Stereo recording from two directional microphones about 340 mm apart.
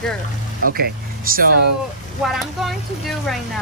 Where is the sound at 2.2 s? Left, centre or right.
Centre.